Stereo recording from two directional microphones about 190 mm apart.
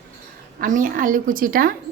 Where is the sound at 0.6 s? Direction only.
45° right (ahead or behind).